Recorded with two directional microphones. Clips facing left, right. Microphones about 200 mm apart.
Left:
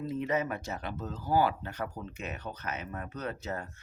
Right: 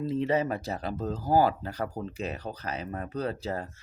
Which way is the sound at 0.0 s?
30° right (ahead or behind).